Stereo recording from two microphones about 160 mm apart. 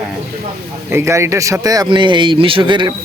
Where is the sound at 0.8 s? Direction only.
15° right (ahead or behind).